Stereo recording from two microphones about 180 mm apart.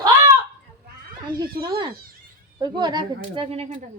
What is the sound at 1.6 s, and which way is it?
Cat, 25° right (ahead or behind).